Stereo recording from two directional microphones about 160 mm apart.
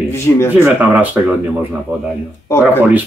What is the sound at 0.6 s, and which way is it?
Speech, 10° right (ahead or behind).